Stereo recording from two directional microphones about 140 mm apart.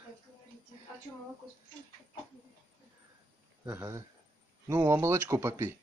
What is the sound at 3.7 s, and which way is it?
Speech, 15° right (ahead or behind).